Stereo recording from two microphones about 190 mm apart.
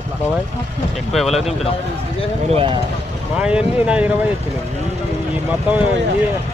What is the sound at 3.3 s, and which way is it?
Speech, 5° right (ahead or behind).